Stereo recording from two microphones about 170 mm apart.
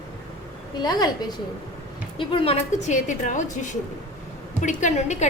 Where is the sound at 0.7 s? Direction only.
25° left (ahead or behind); by 3.5 s 45° left (ahead or behind).